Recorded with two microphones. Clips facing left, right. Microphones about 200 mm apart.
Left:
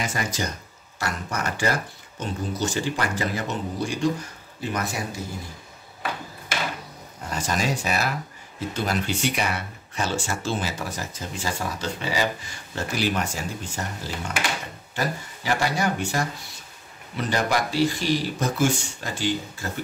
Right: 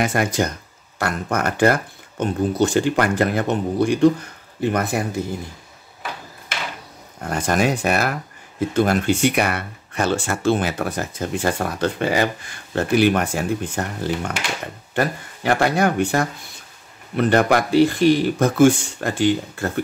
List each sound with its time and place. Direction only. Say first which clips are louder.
0.0 s speech: right 8 dB; 55° right (ahead or behind)
7.2 s speech: right 7 dB; 55° right (ahead or behind)